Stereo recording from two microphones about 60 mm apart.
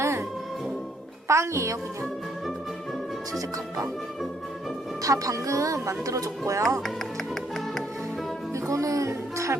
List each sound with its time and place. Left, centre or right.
0.0 s music: right
1.3 s a child's voice: right
5.0 s speech: right
8.5 s a child's voice: right